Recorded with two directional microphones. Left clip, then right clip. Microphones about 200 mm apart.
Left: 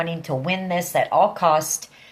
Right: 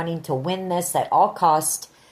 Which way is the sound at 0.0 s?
45° right (ahead or behind).